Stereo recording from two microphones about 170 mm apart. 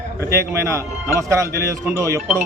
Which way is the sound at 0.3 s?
15° right (ahead or behind).